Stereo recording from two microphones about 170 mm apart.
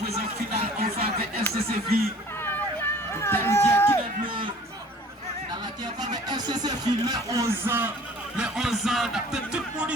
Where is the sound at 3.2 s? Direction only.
15° left (ahead or behind).